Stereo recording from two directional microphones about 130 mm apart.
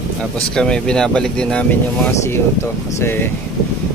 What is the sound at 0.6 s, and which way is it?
Speech, 5° left (ahead or behind).